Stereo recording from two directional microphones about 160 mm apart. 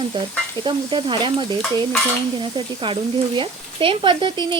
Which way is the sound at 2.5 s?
30° right (ahead or behind).